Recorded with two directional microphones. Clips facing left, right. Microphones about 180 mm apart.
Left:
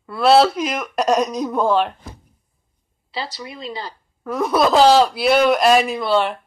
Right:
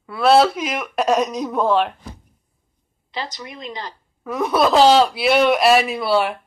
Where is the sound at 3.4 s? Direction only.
30° left (ahead or behind).